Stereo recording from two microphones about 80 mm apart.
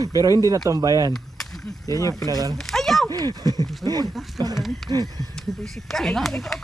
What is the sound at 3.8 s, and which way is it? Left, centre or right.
Speech, left.